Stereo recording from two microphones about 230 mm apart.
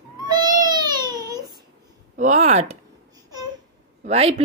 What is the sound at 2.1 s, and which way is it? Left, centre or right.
Speech, right.